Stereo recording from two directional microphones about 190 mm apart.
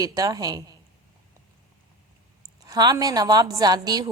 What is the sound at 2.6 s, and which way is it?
A woman's voice, 20° right (ahead or behind).